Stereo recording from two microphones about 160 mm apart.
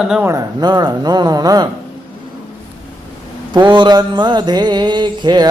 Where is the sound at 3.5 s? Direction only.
30° right (ahead or behind).